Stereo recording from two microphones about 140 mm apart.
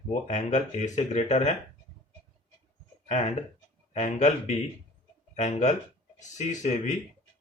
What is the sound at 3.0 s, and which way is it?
Speech, 50° left (ahead or behind).